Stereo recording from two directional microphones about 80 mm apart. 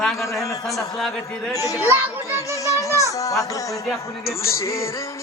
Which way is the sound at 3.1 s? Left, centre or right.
Left.